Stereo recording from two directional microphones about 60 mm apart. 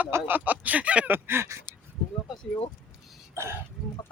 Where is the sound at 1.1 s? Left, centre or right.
Right.